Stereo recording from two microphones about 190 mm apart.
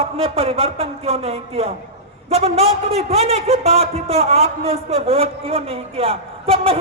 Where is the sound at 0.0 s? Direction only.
30° right (ahead or behind).